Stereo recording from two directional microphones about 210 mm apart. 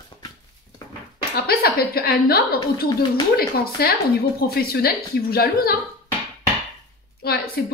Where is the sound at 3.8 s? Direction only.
50° left (ahead or behind).